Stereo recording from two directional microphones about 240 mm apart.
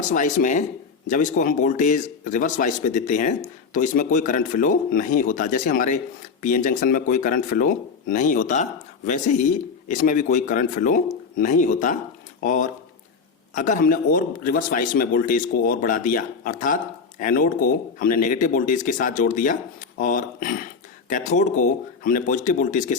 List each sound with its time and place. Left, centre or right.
0.1 s speech: left
9.9 s speech: left